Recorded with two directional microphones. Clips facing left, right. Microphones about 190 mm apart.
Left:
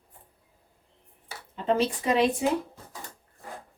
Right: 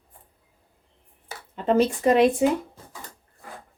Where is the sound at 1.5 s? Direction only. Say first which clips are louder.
Right 5 dB; 50° right (ahead or behind).